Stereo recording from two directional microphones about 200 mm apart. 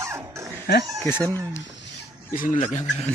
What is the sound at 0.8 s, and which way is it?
Speech, 15° right (ahead or behind).